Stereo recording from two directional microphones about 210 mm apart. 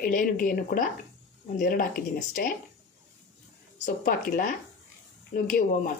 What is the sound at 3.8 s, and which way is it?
Speech, 40° left (ahead or behind).